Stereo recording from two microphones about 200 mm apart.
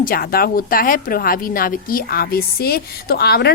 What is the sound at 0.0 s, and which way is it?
A woman's voice, 50° left (ahead or behind).